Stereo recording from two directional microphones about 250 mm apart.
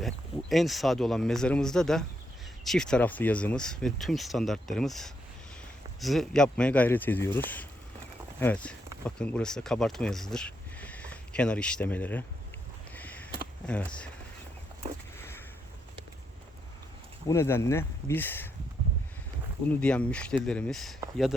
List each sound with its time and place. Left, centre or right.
0.0 s speech: centre
12.9 s sniff: centre
13.7 s speech: centre
14.8 s a sound: right
15.2 s a sound: centre
17.2 s speech: centre
19.8 s speech: centre